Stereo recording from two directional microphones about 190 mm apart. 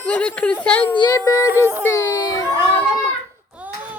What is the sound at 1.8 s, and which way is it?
Speech, 15° left (ahead or behind).